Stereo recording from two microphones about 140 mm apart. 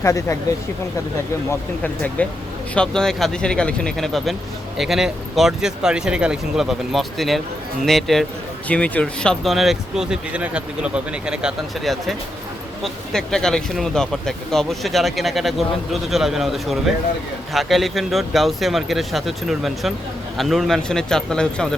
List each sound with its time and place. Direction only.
0.0 s speech: 20° left (ahead or behind)
1.5 s speech: 10° left (ahead or behind)